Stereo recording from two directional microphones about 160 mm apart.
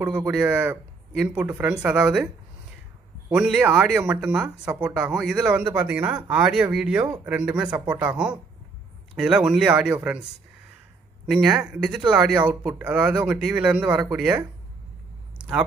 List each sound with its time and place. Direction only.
0.0 s speech: 5° right (ahead or behind)
3.3 s speech: 5° right (ahead or behind)
11.2 s speech: 5° right (ahead or behind)